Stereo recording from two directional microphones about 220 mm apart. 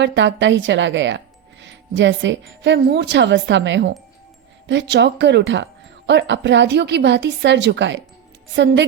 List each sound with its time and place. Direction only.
0.0 s a woman's voice: 55° right (ahead or behind)